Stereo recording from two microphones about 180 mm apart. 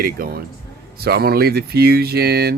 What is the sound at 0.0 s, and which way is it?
Speech, 55° right (ahead or behind).